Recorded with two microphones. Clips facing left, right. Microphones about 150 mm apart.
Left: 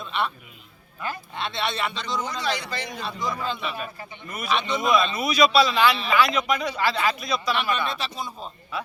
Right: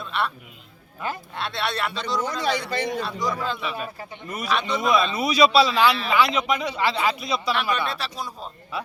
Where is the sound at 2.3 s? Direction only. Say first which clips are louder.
Right 2 dB; 55° right (ahead or behind).